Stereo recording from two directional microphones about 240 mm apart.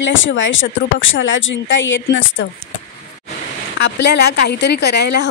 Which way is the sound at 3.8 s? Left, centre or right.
Left.